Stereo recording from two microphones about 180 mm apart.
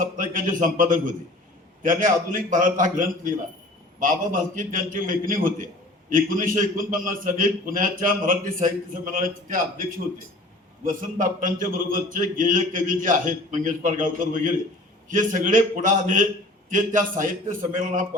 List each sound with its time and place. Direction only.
0.0 s a man's voice: 50° right (ahead or behind)
10.8 s a man's voice: 50° right (ahead or behind)